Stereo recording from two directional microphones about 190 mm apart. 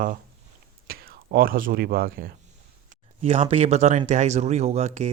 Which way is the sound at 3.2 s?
35° right (ahead or behind).